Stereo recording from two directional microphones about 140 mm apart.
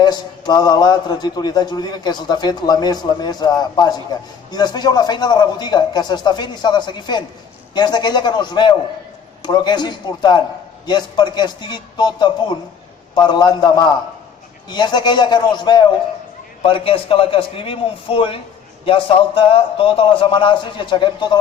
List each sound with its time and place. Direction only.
0.0 s a man's voice: 30° left (ahead or behind)